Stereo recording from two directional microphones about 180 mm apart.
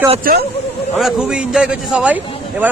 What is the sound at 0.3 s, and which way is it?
Speech, 50° right (ahead or behind).